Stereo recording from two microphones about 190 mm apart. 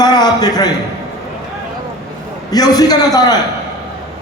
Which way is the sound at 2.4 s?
20° left (ahead or behind).